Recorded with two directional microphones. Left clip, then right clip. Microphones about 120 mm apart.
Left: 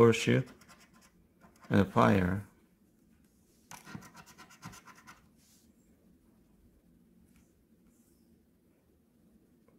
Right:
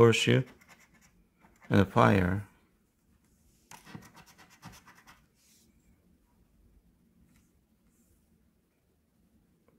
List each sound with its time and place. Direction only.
0.0 s speech: 35° right (ahead or behind)
1.7 s speech: 40° right (ahead or behind)